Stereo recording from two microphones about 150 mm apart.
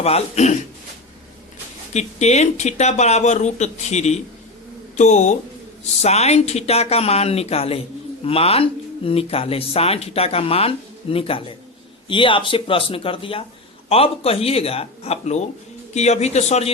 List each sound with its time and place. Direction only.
0.0 s speech: 45° left (ahead or behind)
1.9 s speech: 50° left (ahead or behind)